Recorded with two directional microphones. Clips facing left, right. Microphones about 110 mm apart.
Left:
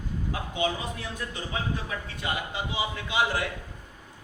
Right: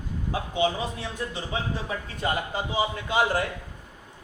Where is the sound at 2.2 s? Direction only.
40° right (ahead or behind).